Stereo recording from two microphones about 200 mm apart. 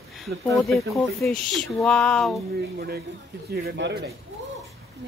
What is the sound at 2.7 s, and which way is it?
A man's voice, 50° right (ahead or behind).